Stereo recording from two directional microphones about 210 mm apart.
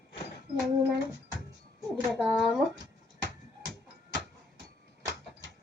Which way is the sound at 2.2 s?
Centre (ahead or behind).